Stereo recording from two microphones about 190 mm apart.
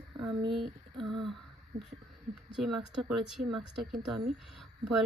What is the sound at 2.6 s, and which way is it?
Speech, centre (ahead or behind).